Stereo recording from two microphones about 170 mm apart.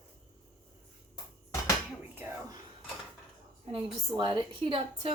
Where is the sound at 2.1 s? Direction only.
15° right (ahead or behind).